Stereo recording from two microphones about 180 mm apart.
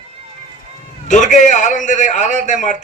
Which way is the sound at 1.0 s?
45° left (ahead or behind).